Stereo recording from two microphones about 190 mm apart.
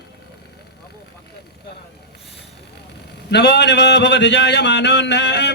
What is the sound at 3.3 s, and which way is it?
A man's voice, 60° left (ahead or behind).